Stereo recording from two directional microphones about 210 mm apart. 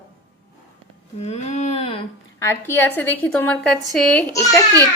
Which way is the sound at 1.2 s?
30° left (ahead or behind).